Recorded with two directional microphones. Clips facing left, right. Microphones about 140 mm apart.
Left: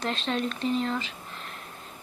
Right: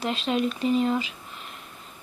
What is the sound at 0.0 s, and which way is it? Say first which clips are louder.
Speech: right 3 dB; 5° right (ahead or behind).